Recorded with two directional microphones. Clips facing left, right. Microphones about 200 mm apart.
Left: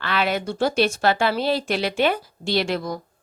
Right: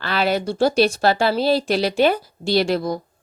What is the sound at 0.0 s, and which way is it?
Speech, 35° right (ahead or behind).